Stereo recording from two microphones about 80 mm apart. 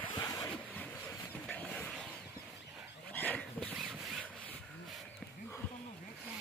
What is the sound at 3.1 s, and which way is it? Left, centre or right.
Dog, centre.